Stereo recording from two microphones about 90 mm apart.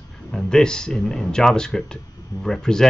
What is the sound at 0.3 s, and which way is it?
Speech, 5° left (ahead or behind).